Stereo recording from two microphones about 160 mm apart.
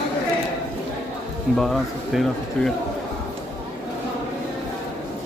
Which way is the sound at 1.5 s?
Centre (ahead or behind).